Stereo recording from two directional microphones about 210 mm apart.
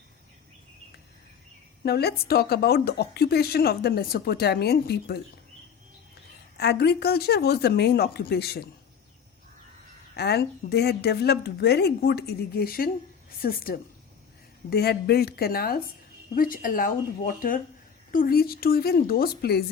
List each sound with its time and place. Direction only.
1.8 s a woman's voice: 50° left (ahead or behind)
6.6 s a woman's voice: 50° left (ahead or behind)
10.2 s a woman's voice: 50° left (ahead or behind)